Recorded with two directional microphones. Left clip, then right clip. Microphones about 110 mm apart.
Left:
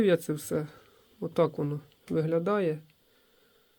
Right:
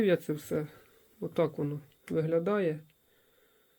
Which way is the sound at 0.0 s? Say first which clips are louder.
Left 2 dB; 25° left (ahead or behind).